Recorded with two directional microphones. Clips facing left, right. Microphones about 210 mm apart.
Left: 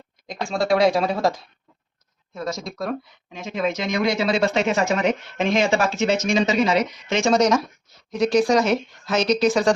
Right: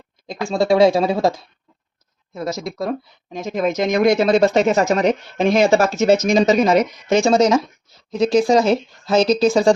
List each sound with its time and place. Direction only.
0.3 s speech: 25° right (ahead or behind)
3.3 s speech: 45° right (ahead or behind)